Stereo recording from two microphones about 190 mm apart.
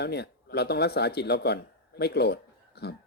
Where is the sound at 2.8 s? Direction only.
60° left (ahead or behind).